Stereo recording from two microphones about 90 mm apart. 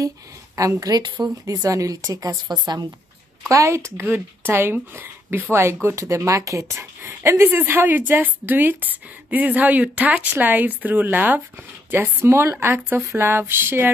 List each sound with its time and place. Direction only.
0.6 s a woman's voice: 40° right (ahead or behind)
1.4 s speech: 40° right (ahead or behind)
3.4 s speech: 35° right (ahead or behind)